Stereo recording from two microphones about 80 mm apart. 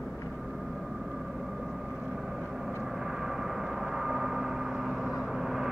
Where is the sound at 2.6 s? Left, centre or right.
Centre.